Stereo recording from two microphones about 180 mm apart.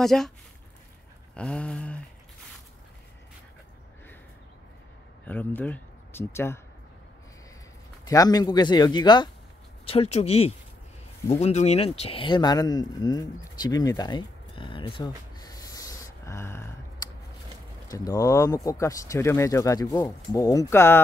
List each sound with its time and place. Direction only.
0.0 s a sound: centre (ahead or behind)
1.3 s a sound: 5° left (ahead or behind)
5.2 s speech: 10° left (ahead or behind)
8.0 s speech: 20° left (ahead or behind)
9.8 s speech: 35° left (ahead or behind); by 16.7 s 15° left (ahead or behind)
17.8 s speech: 20° left (ahead or behind)